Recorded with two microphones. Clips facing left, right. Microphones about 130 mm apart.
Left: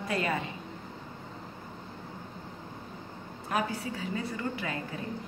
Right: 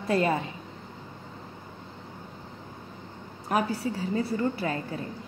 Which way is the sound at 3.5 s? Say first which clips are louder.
Right 5 dB; 40° right (ahead or behind).